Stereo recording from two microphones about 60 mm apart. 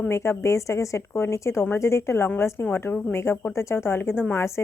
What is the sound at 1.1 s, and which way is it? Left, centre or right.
Speech, left.